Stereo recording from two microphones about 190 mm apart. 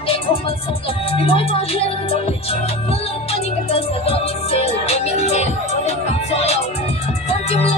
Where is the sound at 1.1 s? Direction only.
30° left (ahead or behind).